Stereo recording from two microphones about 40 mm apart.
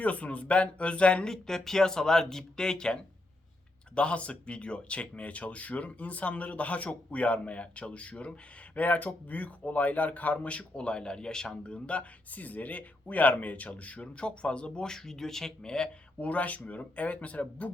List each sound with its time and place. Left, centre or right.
0.0 s speech: left
1.3 s speech: centre
3.9 s speech: left
11.7 s speech: left; by 15.9 s centre
16.2 s speech: left